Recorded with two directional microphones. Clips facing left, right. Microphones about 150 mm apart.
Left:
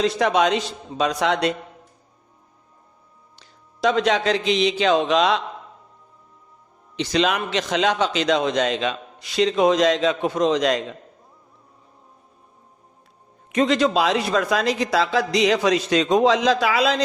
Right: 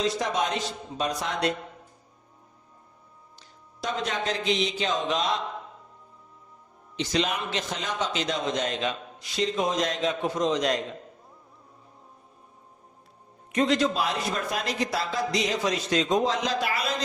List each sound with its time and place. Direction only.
0.0 s a man's voice: 70° left (ahead or behind); by 1.5 s 90° left
3.3 s a man's voice: 90° left
6.9 s a man's voice: 80° left
13.5 s a man's voice: 90° left